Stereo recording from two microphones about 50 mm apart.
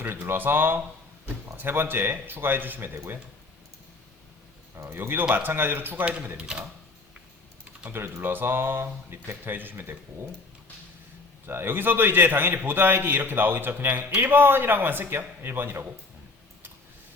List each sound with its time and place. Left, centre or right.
0.3 s a man's voice: right
4.9 s a man's voice: right
6.4 s speech: centre
7.9 s speech: right
8.2 s a man's voice: right
11.4 s a man's voice: right